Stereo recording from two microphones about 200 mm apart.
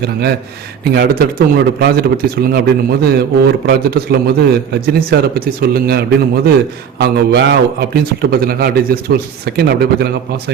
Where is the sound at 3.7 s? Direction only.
50° right (ahead or behind).